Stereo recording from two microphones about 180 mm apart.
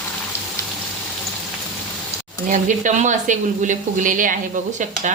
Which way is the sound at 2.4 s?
45° right (ahead or behind).